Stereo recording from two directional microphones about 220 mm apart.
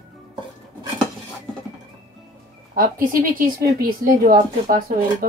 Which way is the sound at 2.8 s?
40° right (ahead or behind).